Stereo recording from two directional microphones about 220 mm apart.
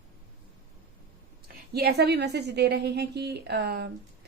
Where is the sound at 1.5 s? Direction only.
45° right (ahead or behind).